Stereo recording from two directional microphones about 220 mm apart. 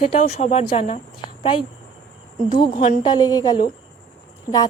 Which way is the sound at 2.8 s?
20° left (ahead or behind).